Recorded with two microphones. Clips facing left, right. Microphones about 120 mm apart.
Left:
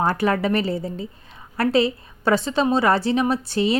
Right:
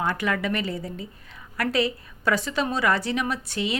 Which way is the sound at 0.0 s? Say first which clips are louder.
Left 5 dB; 35° left (ahead or behind).